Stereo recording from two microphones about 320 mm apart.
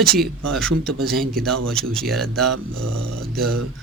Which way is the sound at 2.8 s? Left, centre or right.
Right.